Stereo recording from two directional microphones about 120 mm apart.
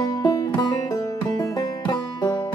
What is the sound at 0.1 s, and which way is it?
Music, 30° left (ahead or behind).